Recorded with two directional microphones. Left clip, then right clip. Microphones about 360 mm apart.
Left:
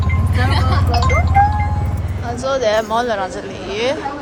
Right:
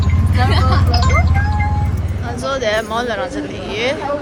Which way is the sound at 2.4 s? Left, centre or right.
Centre.